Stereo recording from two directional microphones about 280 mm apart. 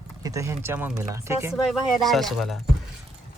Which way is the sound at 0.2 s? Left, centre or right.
Centre.